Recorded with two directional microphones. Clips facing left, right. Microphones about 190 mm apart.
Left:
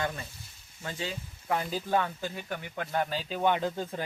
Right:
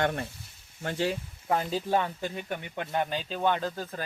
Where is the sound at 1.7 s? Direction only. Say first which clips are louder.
Right 1 dB; 25° right (ahead or behind).